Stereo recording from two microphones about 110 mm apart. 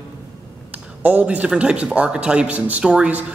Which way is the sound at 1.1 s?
15° right (ahead or behind).